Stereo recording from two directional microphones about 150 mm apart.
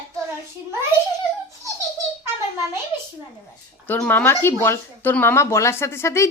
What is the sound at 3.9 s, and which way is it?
Speech, 10° left (ahead or behind).